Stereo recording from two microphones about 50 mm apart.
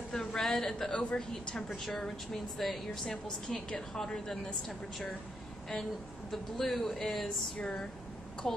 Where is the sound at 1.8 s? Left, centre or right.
Centre.